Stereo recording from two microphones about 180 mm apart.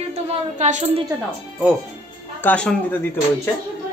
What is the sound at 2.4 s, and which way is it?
Speech, 5° left (ahead or behind).